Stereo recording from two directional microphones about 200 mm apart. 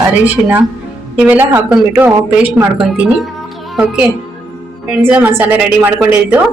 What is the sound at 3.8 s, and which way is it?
A woman's voice, 5° right (ahead or behind).